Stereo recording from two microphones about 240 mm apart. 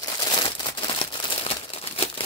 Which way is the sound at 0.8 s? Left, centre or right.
Centre.